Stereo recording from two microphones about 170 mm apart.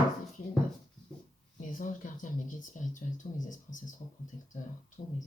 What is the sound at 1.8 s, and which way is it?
Speech, 50° left (ahead or behind).